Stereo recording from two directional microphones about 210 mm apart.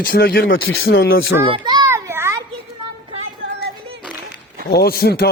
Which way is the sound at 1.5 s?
20° right (ahead or behind).